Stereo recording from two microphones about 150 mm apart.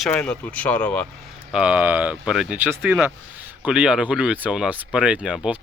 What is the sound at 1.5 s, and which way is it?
Speech, 5° right (ahead or behind).